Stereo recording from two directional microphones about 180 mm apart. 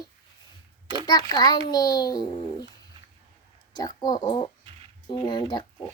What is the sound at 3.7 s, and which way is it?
A child's voice, 20° left (ahead or behind).